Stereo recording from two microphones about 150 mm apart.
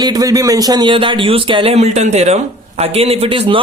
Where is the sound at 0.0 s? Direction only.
25° right (ahead or behind).